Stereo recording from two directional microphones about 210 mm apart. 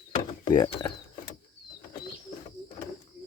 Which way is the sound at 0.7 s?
20° left (ahead or behind).